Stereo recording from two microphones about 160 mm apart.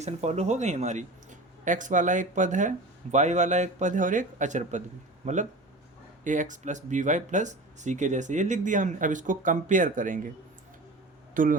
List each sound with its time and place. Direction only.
0.0 s speech: 45° right (ahead or behind)
11.4 s speech: 55° right (ahead or behind)